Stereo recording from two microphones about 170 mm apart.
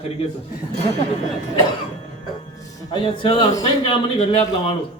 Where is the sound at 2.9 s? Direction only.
30° left (ahead or behind).